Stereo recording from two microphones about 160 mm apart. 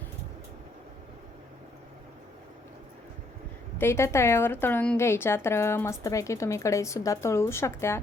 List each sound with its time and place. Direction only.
3.8 s a woman's voice: 15° left (ahead or behind)